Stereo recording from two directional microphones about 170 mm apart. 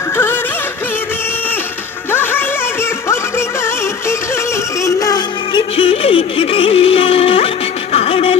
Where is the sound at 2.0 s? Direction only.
15° left (ahead or behind).